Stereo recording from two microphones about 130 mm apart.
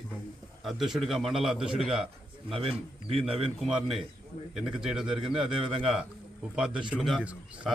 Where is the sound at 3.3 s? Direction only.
5° right (ahead or behind).